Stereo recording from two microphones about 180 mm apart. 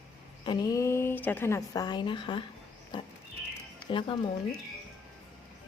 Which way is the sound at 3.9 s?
25° left (ahead or behind).